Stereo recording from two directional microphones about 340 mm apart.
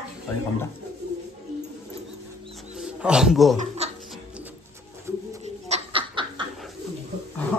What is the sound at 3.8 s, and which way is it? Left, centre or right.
Music, centre.